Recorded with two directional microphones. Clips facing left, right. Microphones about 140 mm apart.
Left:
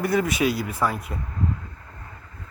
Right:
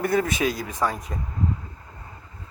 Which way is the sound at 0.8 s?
40° right (ahead or behind).